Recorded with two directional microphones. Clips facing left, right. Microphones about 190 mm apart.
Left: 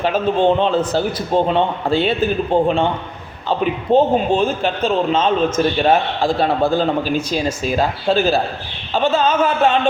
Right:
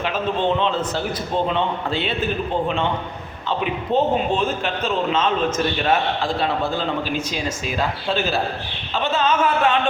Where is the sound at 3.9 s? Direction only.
30° left (ahead or behind).